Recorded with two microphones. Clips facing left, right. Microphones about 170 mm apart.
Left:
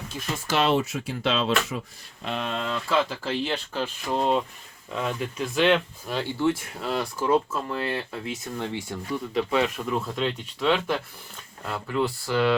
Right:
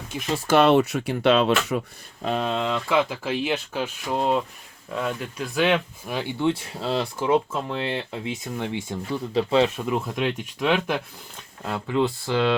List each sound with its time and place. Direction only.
0.4 s speech: 55° right (ahead or behind)
2.2 s speech: 35° right (ahead or behind)
2.6 s speech: 20° right (ahead or behind)
6.7 s speech: 25° right (ahead or behind)
9.3 s speech: 25° right (ahead or behind)
9.9 s speech: 10° right (ahead or behind)
11.6 s speech: 25° right (ahead or behind)